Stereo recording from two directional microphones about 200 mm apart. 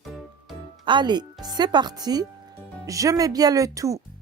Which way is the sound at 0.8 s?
20° right (ahead or behind).